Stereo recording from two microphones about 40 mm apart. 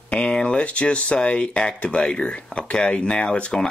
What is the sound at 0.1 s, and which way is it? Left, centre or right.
Speech, left.